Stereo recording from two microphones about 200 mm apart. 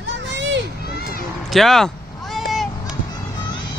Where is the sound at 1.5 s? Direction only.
Centre (ahead or behind).